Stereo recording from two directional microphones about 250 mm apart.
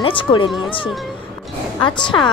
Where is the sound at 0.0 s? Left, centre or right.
Centre.